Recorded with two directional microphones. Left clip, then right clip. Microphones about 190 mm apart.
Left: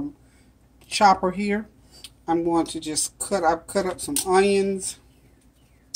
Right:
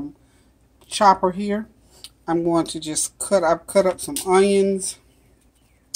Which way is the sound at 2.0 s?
20° right (ahead or behind).